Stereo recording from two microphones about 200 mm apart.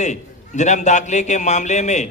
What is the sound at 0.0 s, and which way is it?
A man's voice, 35° left (ahead or behind).